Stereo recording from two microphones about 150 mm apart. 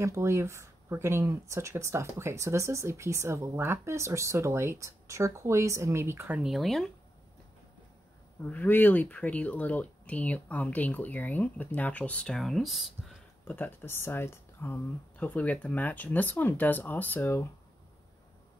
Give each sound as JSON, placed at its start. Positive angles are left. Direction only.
{"t": 0.0, "sound": "speech", "side_deg": -20}
{"t": 8.4, "sound": "speech", "side_deg": 10}
{"t": 13.5, "sound": "speech", "side_deg": 10}